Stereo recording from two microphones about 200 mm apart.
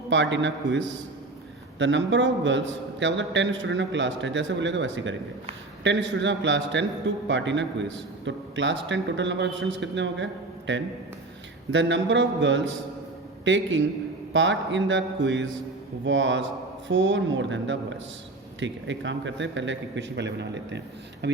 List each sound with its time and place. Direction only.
0.1 s a man's voice: 65° right (ahead or behind)
1.8 s a man's voice: 65° right (ahead or behind)
11.7 s a man's voice: 65° right (ahead or behind)